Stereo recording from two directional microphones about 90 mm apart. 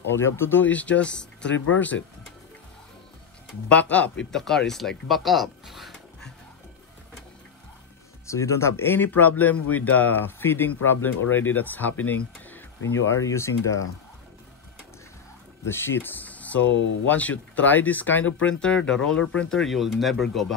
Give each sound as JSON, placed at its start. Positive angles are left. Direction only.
{"t": 0.1, "sound": "speech", "side_deg": 25}
{"t": 3.6, "sound": "speech", "side_deg": 15}
{"t": 8.3, "sound": "speech", "side_deg": 35}
{"t": 15.7, "sound": "speech", "side_deg": 25}